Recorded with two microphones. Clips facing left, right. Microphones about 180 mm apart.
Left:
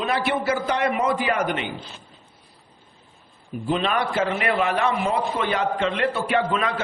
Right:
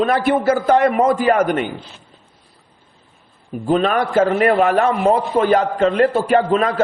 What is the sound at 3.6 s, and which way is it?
A man's voice, 45° right (ahead or behind).